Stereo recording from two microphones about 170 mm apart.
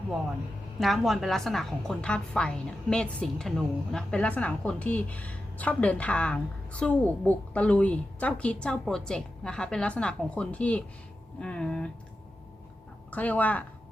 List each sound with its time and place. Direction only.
0.8 s a woman's voice: centre (ahead or behind)
13.1 s a woman's voice: 10° left (ahead or behind)